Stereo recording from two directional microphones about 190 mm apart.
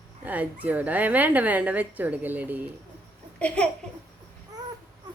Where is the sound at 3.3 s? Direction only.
5° left (ahead or behind).